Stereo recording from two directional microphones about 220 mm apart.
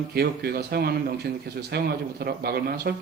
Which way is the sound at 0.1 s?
45° right (ahead or behind).